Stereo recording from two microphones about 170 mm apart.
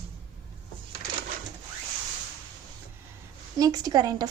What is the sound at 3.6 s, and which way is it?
Speech, 20° right (ahead or behind).